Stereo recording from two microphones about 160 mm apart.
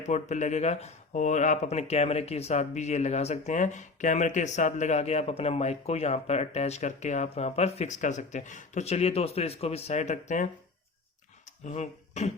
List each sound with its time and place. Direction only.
0.0 s speech: 45° left (ahead or behind)
11.6 s speech: 45° left (ahead or behind)